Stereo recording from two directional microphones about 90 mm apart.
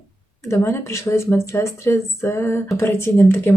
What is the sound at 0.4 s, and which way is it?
Speech, 30° left (ahead or behind).